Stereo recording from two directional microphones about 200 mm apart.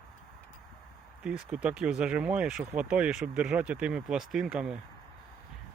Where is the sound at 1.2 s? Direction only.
5° right (ahead or behind).